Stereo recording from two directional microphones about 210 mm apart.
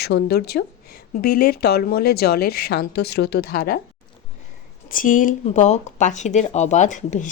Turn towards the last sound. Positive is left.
turn(degrees=35)  # may be behind; listen again after turning